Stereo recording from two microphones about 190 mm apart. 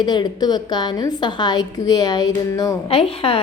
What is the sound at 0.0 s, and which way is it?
A woman's voice, 20° left (ahead or behind).